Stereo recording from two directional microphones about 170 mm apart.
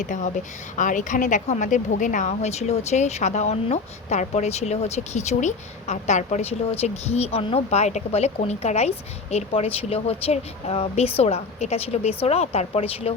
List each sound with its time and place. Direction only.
0.0 s a woman's voice: 50° left (ahead or behind)